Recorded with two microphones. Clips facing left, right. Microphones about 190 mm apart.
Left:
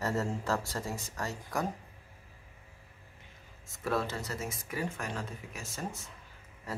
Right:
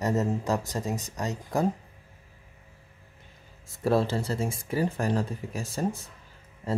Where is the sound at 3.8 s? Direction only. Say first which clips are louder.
Right 8 dB; 30° right (ahead or behind).